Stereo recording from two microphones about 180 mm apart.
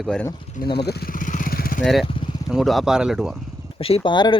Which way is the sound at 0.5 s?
60° left (ahead or behind).